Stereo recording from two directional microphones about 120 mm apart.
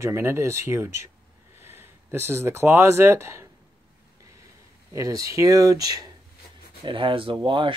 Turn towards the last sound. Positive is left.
turn(degrees=-45)  # may be behind; listen again after turning